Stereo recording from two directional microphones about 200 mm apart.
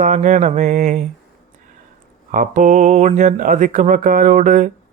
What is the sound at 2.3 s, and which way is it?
Speech, 40° right (ahead or behind).